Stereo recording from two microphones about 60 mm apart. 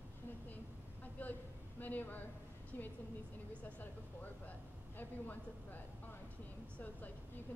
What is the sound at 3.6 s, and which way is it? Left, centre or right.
A woman's voice, left.